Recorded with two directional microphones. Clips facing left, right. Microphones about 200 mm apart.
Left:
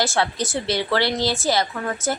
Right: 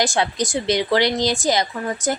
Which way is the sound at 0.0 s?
15° right (ahead or behind).